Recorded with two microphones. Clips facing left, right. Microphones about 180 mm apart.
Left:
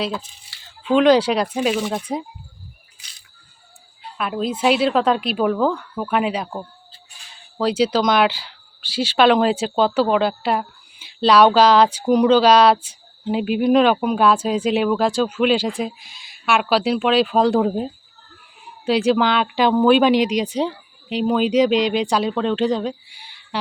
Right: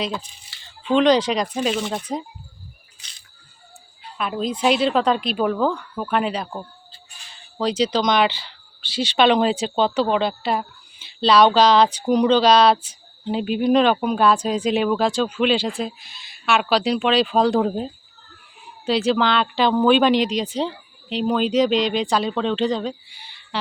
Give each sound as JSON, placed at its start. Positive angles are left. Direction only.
{"t": 0.6, "sound": "speech", "side_deg": 5}
{"t": 3.0, "sound": "music", "side_deg": 10}
{"t": 4.2, "sound": "a woman's voice", "side_deg": 5}
{"t": 7.6, "sound": "speech", "side_deg": 5}